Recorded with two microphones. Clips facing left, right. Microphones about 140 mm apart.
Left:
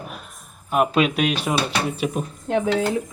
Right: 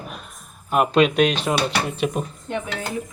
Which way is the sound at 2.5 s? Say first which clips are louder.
Left 7 dB; 90° left.